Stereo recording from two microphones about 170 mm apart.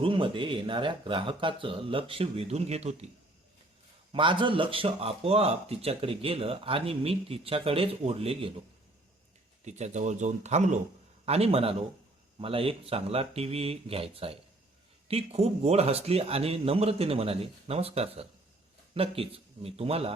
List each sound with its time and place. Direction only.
0.0 s speech: 30° right (ahead or behind)
4.1 s speech: 30° right (ahead or behind)
9.6 s speech: 40° right (ahead or behind)